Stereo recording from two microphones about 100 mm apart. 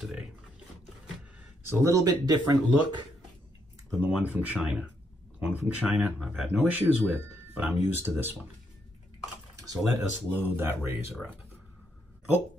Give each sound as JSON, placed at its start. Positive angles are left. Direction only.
{"t": 0.0, "sound": "a sound", "side_deg": -5}
{"t": 1.7, "sound": "speech", "side_deg": -30}
{"t": 3.9, "sound": "speech", "side_deg": -15}
{"t": 4.6, "sound": "speech", "side_deg": -5}
{"t": 5.5, "sound": "speech", "side_deg": -15}
{"t": 6.1, "sound": "speech", "side_deg": 0}
{"t": 6.6, "sound": "speech", "side_deg": -20}
{"t": 9.9, "sound": "speech", "side_deg": -20}